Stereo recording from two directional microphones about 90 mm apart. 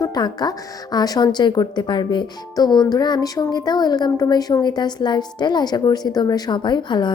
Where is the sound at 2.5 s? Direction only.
50° left (ahead or behind).